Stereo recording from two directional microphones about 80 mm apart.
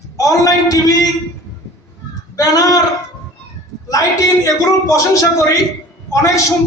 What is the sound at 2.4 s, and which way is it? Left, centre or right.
Speech, left.